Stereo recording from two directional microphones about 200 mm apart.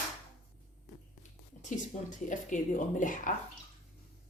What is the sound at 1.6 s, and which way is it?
Speech, 40° left (ahead or behind).